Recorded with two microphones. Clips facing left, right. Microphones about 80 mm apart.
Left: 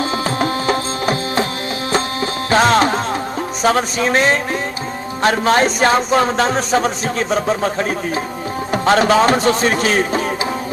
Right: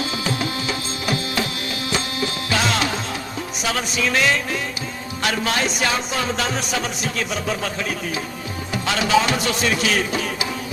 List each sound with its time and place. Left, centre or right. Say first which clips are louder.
0.0 s music: left 6 dB; left
3.6 s speech: left 8 dB; left